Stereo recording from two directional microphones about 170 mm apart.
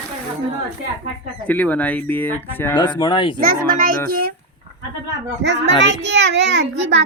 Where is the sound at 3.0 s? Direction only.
30° left (ahead or behind).